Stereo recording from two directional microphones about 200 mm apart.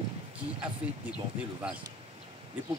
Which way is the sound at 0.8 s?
5° right (ahead or behind).